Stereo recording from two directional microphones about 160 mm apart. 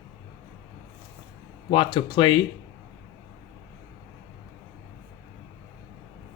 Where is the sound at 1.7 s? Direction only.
30° left (ahead or behind).